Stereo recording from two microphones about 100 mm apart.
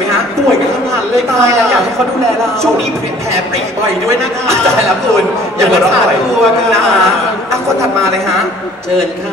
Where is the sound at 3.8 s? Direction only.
25° right (ahead or behind).